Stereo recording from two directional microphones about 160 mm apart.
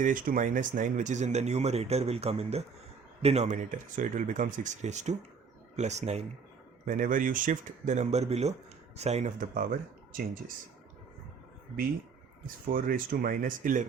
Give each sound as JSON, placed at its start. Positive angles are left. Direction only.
{"t": 0.0, "sound": "speech", "side_deg": -55}
{"t": 12.6, "sound": "speech", "side_deg": -60}